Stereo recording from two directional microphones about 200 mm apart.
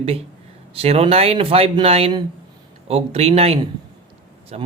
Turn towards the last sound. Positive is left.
turn(degrees=-30)  # may be behind; listen again after turning